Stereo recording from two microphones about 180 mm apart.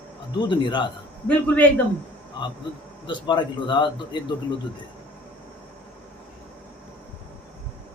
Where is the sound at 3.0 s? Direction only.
25° left (ahead or behind).